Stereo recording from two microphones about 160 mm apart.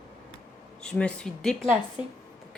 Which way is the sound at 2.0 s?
30° left (ahead or behind).